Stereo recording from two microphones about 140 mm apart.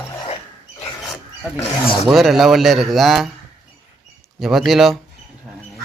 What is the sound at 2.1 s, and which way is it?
Speech, centre (ahead or behind).